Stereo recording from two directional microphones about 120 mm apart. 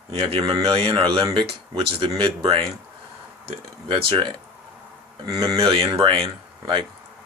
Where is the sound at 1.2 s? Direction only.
40° right (ahead or behind).